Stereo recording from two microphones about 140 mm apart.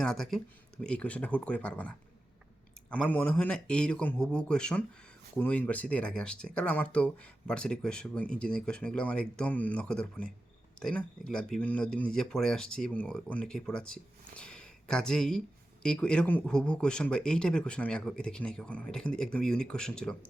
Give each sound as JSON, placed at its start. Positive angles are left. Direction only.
{"t": 0.0, "sound": "speech", "side_deg": 5}